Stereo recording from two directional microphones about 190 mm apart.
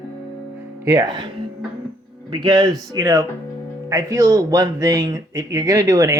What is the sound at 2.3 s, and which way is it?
Speech, 20° right (ahead or behind).